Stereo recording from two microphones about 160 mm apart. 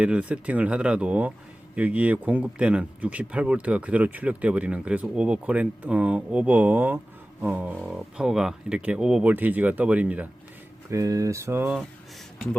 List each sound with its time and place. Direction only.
0.0 s speech: 10° right (ahead or behind)
10.9 s mantra: 20° right (ahead or behind)